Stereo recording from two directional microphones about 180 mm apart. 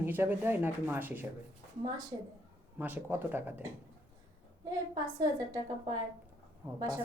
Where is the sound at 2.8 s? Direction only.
10° right (ahead or behind).